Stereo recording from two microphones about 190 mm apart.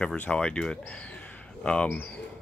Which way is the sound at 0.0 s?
5° left (ahead or behind).